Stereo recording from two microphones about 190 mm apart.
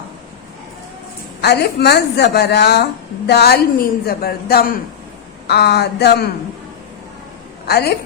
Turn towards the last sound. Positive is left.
turn(degrees=55)  # may be behind; listen again after turning